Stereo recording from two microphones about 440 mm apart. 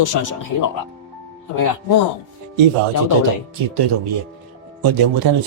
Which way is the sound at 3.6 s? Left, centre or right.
Right.